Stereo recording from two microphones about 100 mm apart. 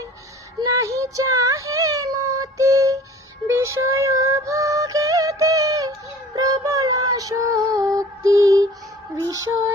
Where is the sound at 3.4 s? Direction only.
30° right (ahead or behind).